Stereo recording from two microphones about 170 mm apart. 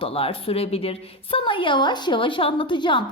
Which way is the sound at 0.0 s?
35° left (ahead or behind).